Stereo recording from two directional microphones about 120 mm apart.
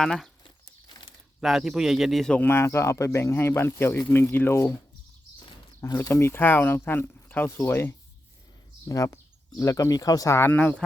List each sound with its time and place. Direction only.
0.0 s a man's voice: 5° left (ahead or behind)
1.4 s a man's voice: 5° right (ahead or behind)
2.4 s speech: 20° left (ahead or behind)
5.8 s speech: 25° left (ahead or behind)